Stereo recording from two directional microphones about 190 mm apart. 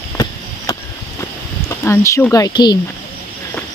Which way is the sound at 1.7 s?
15° left (ahead or behind).